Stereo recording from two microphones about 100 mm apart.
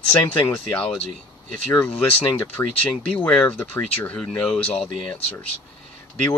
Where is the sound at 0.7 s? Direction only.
10° left (ahead or behind).